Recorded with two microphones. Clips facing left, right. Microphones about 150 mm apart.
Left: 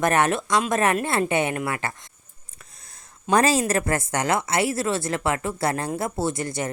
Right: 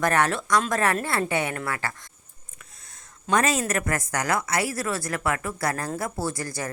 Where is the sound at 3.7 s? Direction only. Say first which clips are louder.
Left 3 dB; 30° left (ahead or behind).